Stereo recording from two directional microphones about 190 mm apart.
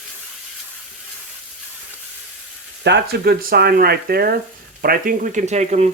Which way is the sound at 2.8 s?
60° right (ahead or behind).